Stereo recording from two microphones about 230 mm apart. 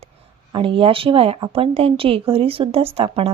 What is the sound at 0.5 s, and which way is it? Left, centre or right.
Speech, right.